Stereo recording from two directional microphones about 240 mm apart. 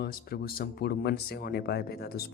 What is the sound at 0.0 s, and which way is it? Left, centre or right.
Speech, left.